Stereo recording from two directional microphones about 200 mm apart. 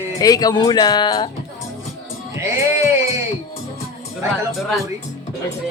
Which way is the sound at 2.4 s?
15° right (ahead or behind).